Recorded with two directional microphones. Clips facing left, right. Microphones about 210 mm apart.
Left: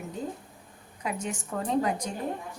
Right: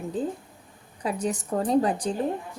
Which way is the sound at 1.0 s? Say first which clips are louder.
Right 5 dB; 35° right (ahead or behind).